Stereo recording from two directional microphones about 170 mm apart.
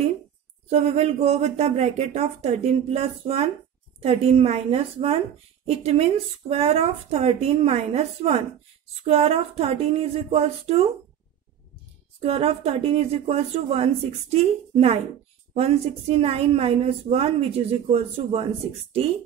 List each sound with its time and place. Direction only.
0.7 s a woman's voice: 40° right (ahead or behind)
12.2 s a woman's voice: 35° right (ahead or behind)